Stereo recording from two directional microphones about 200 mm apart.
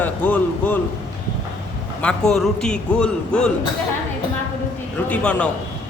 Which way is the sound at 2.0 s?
5° left (ahead or behind).